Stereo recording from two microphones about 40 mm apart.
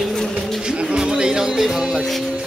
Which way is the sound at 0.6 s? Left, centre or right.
Right.